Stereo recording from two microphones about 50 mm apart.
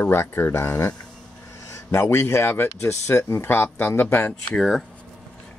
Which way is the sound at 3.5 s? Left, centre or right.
Left.